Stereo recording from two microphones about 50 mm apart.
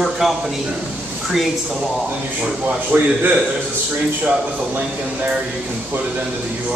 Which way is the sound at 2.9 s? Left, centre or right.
Right.